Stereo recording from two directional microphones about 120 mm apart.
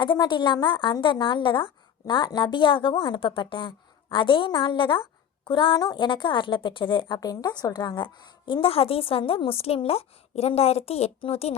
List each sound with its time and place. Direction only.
0.0 s a woman's voice: 40° left (ahead or behind)
7.2 s a woman's voice: 30° left (ahead or behind)
8.6 s a woman's voice: 50° left (ahead or behind)